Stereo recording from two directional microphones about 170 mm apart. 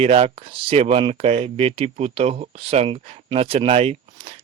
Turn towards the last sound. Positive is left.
turn(degrees=-35)  # may be behind; listen again after turning